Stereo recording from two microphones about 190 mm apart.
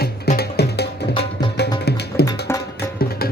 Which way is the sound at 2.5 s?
10° left (ahead or behind).